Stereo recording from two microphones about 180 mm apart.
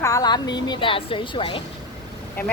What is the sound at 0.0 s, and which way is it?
A woman's voice, 20° left (ahead or behind).